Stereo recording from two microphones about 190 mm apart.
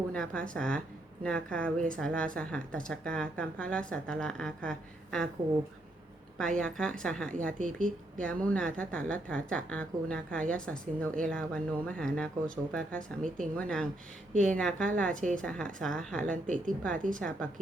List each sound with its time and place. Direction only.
0.1 s a woman's voice: 5° left (ahead or behind)
6.3 s a woman's voice: 5° left (ahead or behind)
13.2 s a woman's voice: 45° right (ahead or behind)
13.6 s a woman's voice: 5° left (ahead or behind)
15.1 s a woman's voice: 40° right (ahead or behind)
15.4 s a woman's voice: 5° left (ahead or behind)
16.2 s a woman's voice: 45° right (ahead or behind)
17.2 s a woman's voice: 5° left (ahead or behind)